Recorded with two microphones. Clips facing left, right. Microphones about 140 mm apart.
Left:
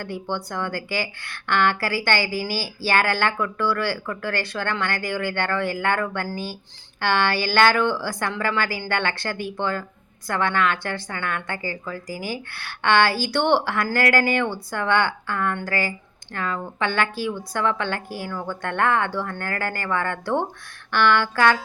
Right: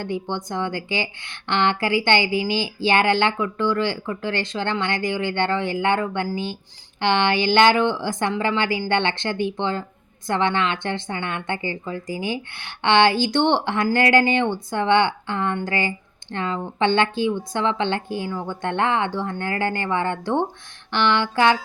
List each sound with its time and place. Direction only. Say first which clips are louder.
0.0 s a woman's voice: right 2 dB; 20° right (ahead or behind)